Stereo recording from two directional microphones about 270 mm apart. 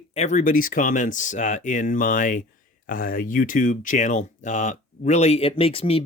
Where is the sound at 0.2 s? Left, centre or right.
Left.